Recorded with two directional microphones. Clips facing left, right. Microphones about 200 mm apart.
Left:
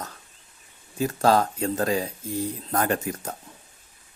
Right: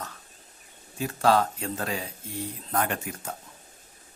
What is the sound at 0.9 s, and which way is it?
Speech, 40° left (ahead or behind).